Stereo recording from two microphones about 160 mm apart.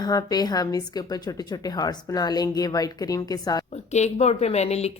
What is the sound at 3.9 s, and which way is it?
A woman's voice, 45° left (ahead or behind).